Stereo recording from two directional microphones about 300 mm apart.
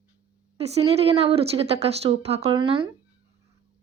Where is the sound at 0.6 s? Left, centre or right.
Centre.